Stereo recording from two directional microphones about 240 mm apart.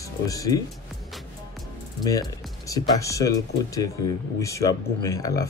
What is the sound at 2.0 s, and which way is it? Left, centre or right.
Speech, centre.